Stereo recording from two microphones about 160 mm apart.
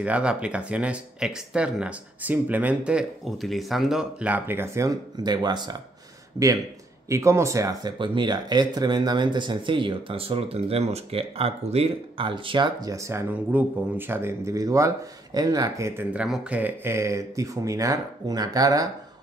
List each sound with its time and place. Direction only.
0.0 s speech: 5° right (ahead or behind); by 5.8 s 25° right (ahead or behind)
7.1 s speech: 20° right (ahead or behind)